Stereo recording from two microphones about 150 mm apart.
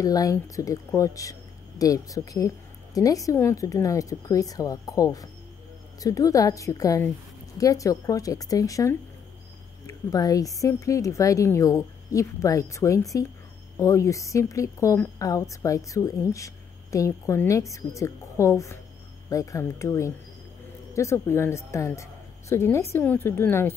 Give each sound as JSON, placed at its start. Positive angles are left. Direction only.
{"t": 0.0, "sound": "a woman's voice", "side_deg": 25}